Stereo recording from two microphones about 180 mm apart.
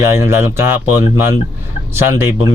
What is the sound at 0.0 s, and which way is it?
Speech, 15° right (ahead or behind).